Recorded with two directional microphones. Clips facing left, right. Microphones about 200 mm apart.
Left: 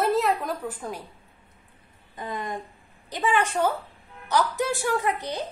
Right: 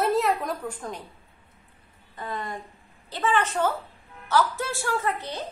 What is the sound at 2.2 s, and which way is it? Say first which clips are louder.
A woman's voice: left 1 dB; 15° left (ahead or behind).